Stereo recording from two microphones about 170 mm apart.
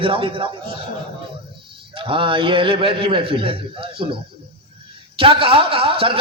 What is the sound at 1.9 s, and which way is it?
A man's voice, 30° right (ahead or behind).